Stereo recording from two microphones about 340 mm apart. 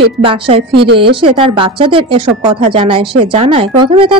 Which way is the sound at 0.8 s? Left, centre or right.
Right.